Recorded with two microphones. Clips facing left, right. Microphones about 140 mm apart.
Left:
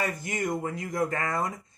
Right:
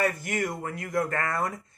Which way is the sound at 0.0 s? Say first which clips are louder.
Right 3 dB; 20° left (ahead or behind).